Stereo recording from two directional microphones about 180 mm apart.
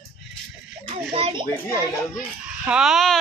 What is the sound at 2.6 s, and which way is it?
Speech, 5° right (ahead or behind).